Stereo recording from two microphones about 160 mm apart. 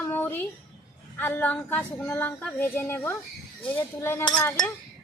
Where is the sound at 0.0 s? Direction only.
15° left (ahead or behind).